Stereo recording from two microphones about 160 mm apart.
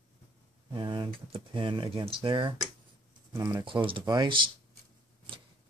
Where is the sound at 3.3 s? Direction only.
20° right (ahead or behind).